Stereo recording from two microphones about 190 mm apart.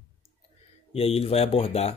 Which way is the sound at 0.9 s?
30° left (ahead or behind).